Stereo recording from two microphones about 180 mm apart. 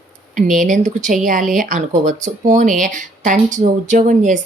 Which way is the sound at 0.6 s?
45° right (ahead or behind).